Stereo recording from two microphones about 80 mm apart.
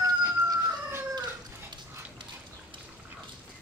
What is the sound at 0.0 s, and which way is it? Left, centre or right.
Chicken, right.